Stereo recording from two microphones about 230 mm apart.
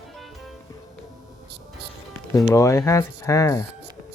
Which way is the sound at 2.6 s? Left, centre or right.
Centre.